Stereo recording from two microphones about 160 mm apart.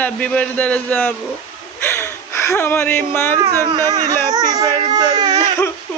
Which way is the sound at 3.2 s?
15° left (ahead or behind).